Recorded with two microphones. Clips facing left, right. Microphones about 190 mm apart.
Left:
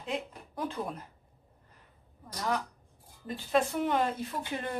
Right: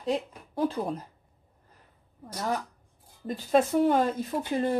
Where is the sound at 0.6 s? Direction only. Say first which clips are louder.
Right 7 dB; 35° right (ahead or behind).